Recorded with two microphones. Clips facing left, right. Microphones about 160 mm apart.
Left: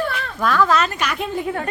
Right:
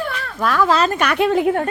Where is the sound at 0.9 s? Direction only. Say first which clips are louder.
Right 8 dB; 60° right (ahead or behind); by 1.5 s 80° right.